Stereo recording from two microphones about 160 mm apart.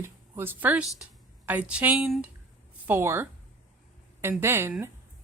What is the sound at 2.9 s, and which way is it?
A woman's voice, 15° right (ahead or behind).